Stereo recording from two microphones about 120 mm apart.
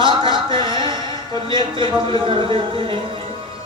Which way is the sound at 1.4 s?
45° right (ahead or behind).